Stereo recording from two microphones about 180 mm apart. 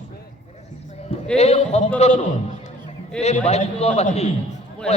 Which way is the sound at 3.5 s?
35° left (ahead or behind).